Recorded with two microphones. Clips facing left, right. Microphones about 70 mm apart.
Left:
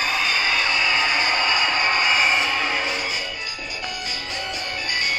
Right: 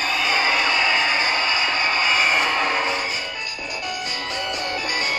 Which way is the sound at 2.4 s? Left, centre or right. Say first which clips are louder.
Right 2 dB; right.